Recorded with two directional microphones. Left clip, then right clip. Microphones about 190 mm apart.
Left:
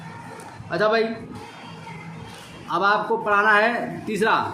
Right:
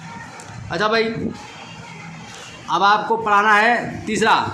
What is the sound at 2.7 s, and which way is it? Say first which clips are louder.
A man's voice: right 4 dB; 15° right (ahead or behind).